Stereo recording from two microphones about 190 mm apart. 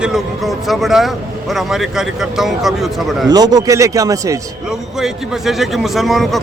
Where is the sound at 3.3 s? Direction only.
20° right (ahead or behind).